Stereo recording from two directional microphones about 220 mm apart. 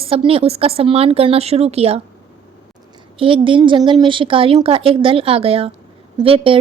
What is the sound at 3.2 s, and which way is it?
A woman's voice, 20° right (ahead or behind).